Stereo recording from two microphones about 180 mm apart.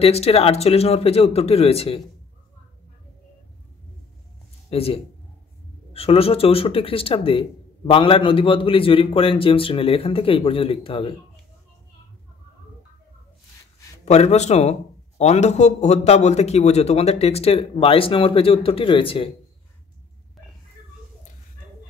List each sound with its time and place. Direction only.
0.0 s a man's voice: 35° left (ahead or behind)
4.6 s a man's voice: 35° left (ahead or behind)
14.0 s a man's voice: 35° left (ahead or behind)